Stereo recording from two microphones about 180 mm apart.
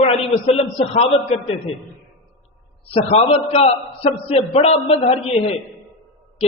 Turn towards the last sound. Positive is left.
turn(degrees=35)  # may be behind; listen again after turning